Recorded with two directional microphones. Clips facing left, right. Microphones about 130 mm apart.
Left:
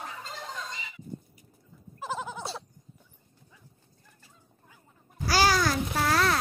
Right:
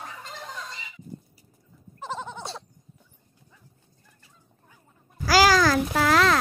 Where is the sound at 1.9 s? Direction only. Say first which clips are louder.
Even; 5° left (ahead or behind).